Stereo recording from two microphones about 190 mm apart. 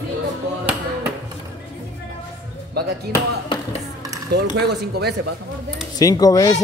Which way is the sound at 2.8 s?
55° right (ahead or behind).